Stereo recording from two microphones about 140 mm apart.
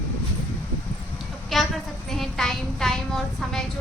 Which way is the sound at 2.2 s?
Centre (ahead or behind).